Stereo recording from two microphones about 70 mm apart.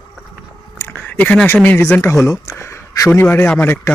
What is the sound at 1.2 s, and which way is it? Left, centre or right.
Speech, left.